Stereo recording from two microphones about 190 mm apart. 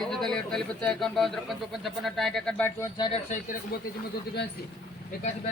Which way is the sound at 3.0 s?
30° left (ahead or behind).